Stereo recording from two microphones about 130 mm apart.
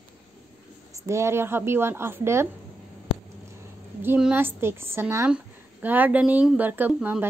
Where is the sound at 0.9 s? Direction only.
20° right (ahead or behind).